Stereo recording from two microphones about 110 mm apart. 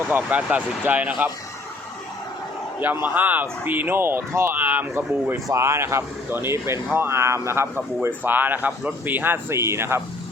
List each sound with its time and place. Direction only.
0.1 s speech: 15° right (ahead or behind)
3.2 s speech: 15° right (ahead or behind)